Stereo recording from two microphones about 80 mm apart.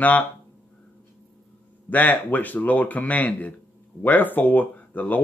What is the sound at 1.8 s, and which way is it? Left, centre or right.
Speech, left.